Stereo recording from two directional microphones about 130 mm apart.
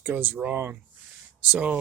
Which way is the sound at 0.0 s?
15° right (ahead or behind).